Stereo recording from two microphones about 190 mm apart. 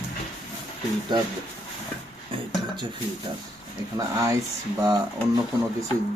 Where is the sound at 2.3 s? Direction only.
30° right (ahead or behind).